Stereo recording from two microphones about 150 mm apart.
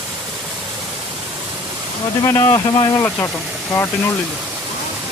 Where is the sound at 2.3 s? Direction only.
20° left (ahead or behind).